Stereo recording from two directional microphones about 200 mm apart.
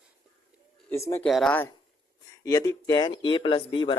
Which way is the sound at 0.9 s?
15° left (ahead or behind).